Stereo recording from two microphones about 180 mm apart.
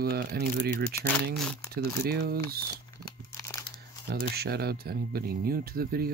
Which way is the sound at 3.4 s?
20° left (ahead or behind).